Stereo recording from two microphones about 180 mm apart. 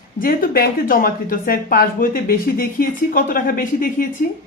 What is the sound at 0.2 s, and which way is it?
A woman's voice, 55° left (ahead or behind).